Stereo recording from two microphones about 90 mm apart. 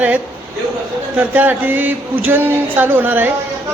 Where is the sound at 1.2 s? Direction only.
20° right (ahead or behind).